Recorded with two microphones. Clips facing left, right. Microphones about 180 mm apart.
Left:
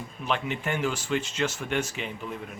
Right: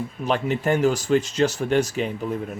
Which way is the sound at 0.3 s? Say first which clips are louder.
Right 7 dB; 40° right (ahead or behind).